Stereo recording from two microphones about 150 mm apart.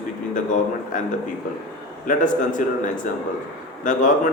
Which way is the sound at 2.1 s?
60° left (ahead or behind).